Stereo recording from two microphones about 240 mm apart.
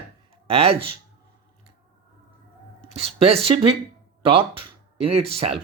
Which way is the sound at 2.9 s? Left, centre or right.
Right.